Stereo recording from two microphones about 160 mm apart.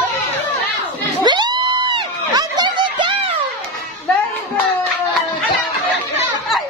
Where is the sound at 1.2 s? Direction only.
25° right (ahead or behind).